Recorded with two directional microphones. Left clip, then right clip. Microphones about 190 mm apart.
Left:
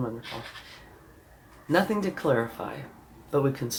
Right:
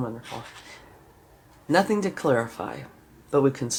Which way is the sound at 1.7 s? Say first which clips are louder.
Right 3 dB; 50° right (ahead or behind).